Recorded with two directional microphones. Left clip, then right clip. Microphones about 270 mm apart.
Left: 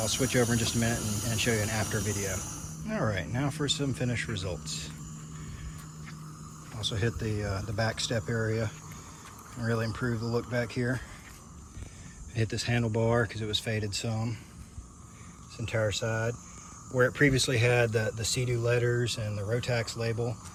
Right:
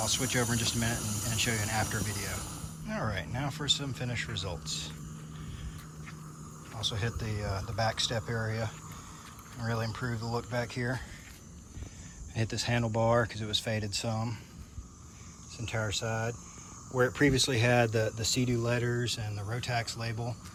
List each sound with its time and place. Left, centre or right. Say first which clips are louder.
0.0 s speech: left 3 dB; centre
6.7 s speech: left 2 dB; centre
12.4 s speech: left 1 dB; centre
15.5 s speech: left 4 dB; centre